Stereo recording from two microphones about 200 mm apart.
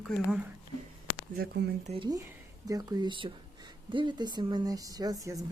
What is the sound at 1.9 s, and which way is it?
Speech, 20° right (ahead or behind).